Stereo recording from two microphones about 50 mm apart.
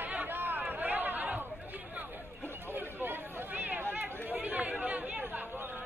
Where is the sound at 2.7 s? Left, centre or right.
Right.